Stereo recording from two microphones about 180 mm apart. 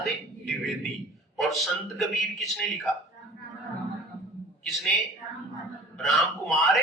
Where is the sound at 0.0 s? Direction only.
Centre (ahead or behind).